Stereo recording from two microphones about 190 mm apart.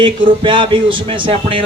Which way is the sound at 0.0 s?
25° right (ahead or behind).